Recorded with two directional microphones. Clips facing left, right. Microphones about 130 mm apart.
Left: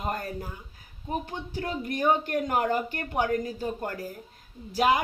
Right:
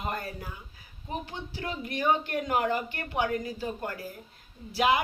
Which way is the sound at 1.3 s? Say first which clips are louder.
Left 3 dB; 45° left (ahead or behind).